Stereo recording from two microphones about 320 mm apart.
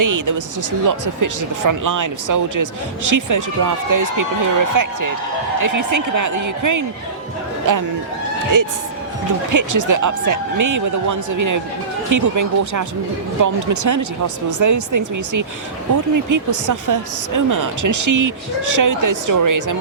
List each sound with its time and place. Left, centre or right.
0.0 s speech: right